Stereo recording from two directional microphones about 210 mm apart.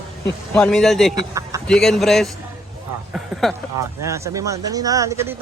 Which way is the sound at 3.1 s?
Centre (ahead or behind).